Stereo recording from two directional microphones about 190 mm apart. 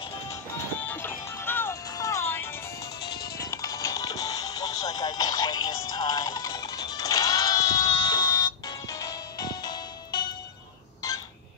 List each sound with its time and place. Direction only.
0.3 s music: 10° left (ahead or behind)